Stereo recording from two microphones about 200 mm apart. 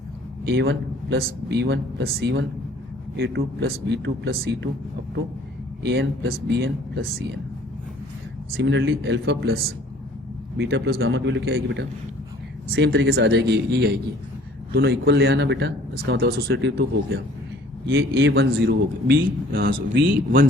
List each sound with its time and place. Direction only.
0.4 s speech: 60° right (ahead or behind)
5.8 s speech: 60° right (ahead or behind)
8.5 s speech: 65° right (ahead or behind)
10.6 s speech: 60° right (ahead or behind)